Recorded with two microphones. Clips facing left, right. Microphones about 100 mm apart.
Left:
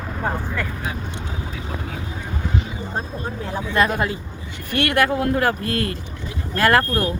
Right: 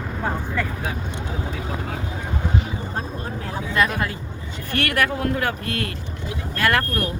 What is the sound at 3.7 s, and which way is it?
Speech, 20° left (ahead or behind).